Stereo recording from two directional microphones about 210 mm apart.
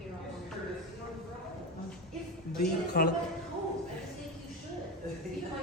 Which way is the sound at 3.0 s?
45° left (ahead or behind).